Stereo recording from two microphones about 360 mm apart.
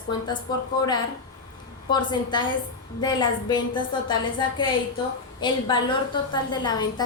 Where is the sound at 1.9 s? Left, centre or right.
Centre.